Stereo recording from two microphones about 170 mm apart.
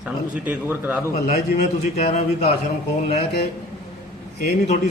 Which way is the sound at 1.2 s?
40° left (ahead or behind).